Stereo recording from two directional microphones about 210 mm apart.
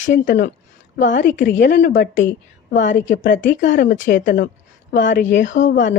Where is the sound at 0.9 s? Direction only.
40° left (ahead or behind).